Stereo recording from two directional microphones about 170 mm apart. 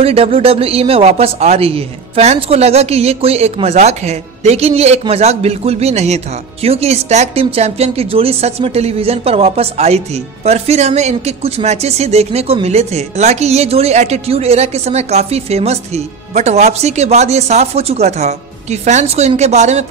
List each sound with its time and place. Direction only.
0.0 s speech: 35° right (ahead or behind)